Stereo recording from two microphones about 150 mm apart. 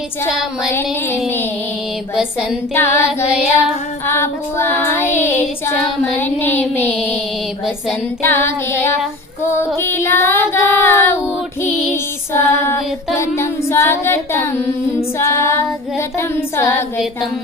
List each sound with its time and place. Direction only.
0.7 s child singing: 15° left (ahead or behind)
2.7 s child singing: 15° left (ahead or behind)
4.0 s child singing: 15° left (ahead or behind)
8.2 s child singing: 15° left (ahead or behind)
12.3 s child singing: 20° left (ahead or behind)